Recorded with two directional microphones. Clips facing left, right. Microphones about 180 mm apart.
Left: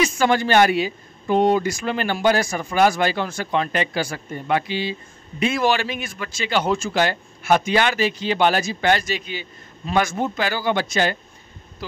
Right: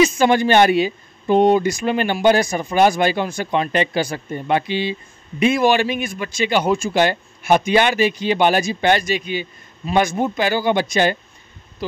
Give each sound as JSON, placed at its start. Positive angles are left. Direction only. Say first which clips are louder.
{"t": 0.0, "sound": "a man's voice", "louder": "right 4 dB", "side_deg": -20}